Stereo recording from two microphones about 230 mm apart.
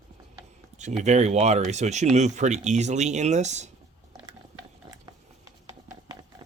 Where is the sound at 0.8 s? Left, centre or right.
Right.